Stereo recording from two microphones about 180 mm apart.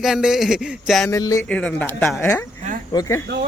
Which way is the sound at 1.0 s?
20° left (ahead or behind).